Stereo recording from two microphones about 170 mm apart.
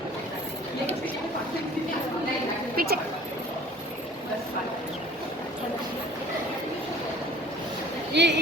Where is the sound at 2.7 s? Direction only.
65° right (ahead or behind).